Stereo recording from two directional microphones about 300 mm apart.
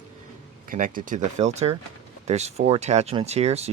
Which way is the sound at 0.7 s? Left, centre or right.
Right.